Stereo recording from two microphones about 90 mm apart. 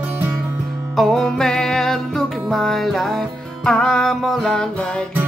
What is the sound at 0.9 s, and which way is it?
Music, 5° left (ahead or behind).